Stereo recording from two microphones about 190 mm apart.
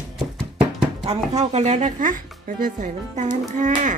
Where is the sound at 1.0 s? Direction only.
35° right (ahead or behind).